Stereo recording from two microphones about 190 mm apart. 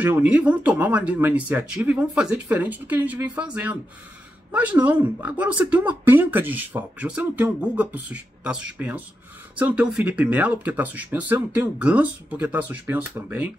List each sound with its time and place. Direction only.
0.0 s speech: 10° right (ahead or behind)